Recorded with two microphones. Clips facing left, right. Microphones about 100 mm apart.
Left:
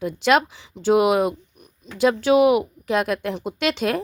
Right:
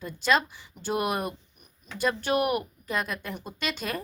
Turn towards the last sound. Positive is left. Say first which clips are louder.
# left 10 dB
turn(degrees=75)  # may be behind; listen again after turning